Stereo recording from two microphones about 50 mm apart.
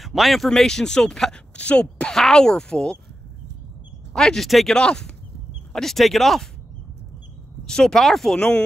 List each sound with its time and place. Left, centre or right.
0.0 s speech: centre
0.5 s speech: centre
4.1 s speech: centre
4.5 s speech: centre
4.7 s speech: centre
7.6 s speech: centre